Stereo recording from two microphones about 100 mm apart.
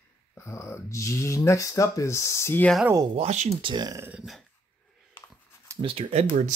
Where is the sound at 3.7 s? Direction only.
45° right (ahead or behind).